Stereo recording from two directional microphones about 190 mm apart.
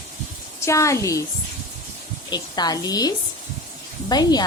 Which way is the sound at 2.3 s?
20° left (ahead or behind).